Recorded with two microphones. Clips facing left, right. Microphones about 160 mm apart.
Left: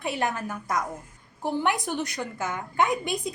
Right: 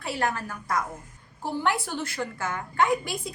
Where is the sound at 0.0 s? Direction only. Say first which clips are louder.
Left 1 dB; 20° left (ahead or behind).